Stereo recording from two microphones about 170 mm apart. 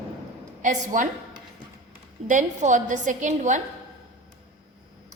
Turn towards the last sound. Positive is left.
turn(degrees=-45)  # may be behind; listen again after turning